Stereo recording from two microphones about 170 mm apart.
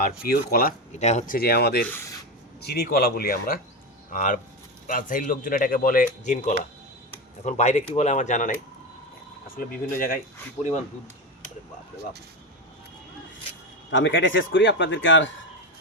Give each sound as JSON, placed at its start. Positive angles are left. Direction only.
{"t": 0.3, "sound": "speech", "side_deg": 65}
{"t": 0.9, "sound": "speech", "side_deg": 40}
{"t": 1.4, "sound": "speech", "side_deg": 70}
{"t": 1.8, "sound": "speech", "side_deg": 15}
{"t": 2.6, "sound": "speech", "side_deg": 70}
{"t": 9.6, "sound": "speech", "side_deg": 55}
{"t": 13.9, "sound": "speech", "side_deg": 90}